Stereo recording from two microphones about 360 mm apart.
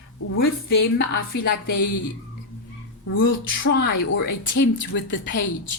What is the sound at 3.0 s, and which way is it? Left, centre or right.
A woman's voice, left.